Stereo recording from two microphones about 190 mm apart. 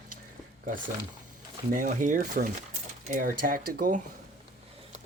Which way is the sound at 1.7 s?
45° right (ahead or behind).